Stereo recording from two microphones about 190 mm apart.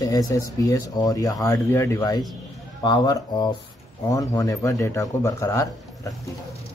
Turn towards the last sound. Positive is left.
turn(degrees=15)  # may be behind; listen again after turning